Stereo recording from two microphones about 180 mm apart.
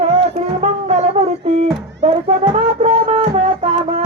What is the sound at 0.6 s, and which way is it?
Brass instrument, 40° right (ahead or behind).